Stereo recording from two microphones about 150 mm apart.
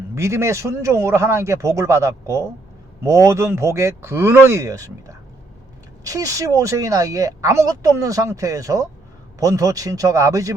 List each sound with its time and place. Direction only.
0.1 s speech: 20° right (ahead or behind)